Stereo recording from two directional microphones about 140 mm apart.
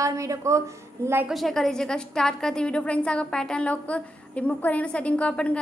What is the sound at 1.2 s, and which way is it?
A woman's voice, centre (ahead or behind).